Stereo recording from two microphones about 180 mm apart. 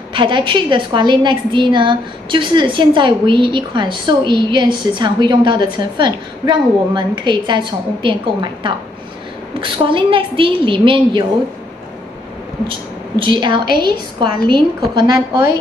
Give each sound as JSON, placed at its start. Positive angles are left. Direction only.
{"t": 0.1, "sound": "a woman's voice", "side_deg": -25}
{"t": 13.2, "sound": "a woman's voice", "side_deg": -25}
{"t": 13.7, "sound": "a woman's voice", "side_deg": 60}
{"t": 14.5, "sound": "a woman's voice", "side_deg": -25}